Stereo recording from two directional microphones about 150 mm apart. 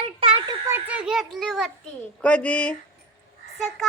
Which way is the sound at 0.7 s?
10° right (ahead or behind).